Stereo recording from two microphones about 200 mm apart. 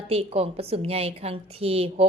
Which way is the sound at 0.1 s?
30° right (ahead or behind).